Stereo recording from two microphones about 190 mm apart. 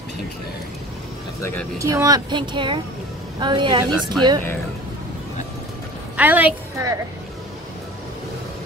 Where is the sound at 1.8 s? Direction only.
15° right (ahead or behind).